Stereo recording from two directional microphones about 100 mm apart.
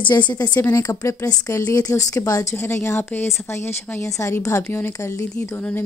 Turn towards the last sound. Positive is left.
turn(degrees=25)  # may be behind; listen again after turning